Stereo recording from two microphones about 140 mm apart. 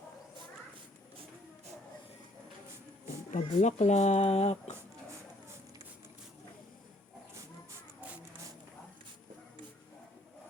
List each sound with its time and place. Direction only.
3.3 s speech: 55° left (ahead or behind)